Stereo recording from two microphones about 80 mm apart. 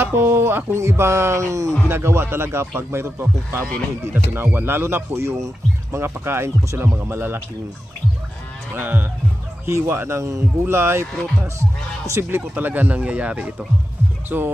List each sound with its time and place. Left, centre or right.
0.0 s speech: right
1.9 s speech: right
8.7 s speech: right
12.0 s speech: right
12.5 s speech: right